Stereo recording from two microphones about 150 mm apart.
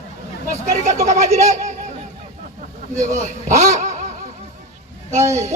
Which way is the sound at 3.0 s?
55° right (ahead or behind).